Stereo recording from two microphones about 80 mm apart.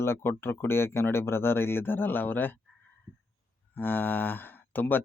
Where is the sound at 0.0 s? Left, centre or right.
Left.